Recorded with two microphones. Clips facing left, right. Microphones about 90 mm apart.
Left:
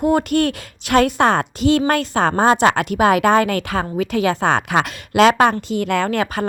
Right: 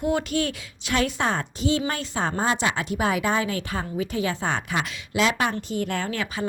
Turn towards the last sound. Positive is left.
turn(degrees=60)  # may be behind; listen again after turning